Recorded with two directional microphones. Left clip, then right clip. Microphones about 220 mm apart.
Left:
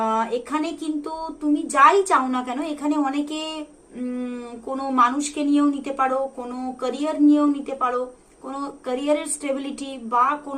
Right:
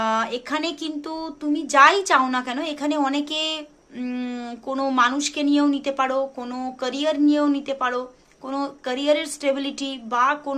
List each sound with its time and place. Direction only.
0.0 s a sound: 40° right (ahead or behind)
1.7 s a woman's voice: 40° right (ahead or behind)
4.7 s a woman's voice: 40° right (ahead or behind)